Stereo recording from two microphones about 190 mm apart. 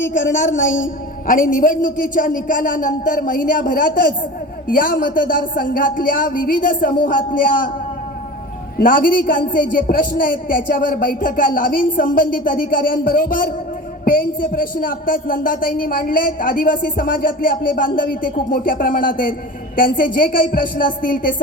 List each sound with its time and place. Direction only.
0.0 s a woman's voice: 75° left (ahead or behind)
0.3 s a woman's voice: 40° left (ahead or behind)
8.8 s speech: 45° left (ahead or behind)